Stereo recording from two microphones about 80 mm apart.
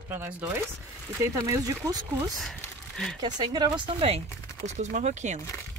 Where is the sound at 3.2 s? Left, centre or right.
Right.